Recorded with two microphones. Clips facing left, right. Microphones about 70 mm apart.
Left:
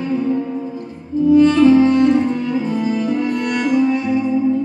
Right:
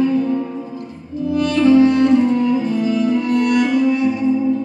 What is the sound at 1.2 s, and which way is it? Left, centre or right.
Music, left.